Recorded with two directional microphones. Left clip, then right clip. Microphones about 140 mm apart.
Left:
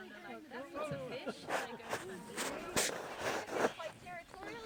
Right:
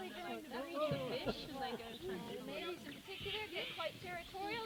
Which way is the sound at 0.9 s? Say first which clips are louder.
Right 2 dB; 35° left (ahead or behind).